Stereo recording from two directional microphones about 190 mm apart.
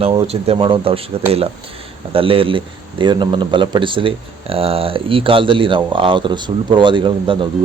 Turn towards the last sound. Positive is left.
turn(degrees=-25)  # may be behind; listen again after turning